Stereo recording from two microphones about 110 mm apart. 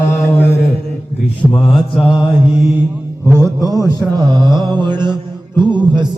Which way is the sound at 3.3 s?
30° right (ahead or behind).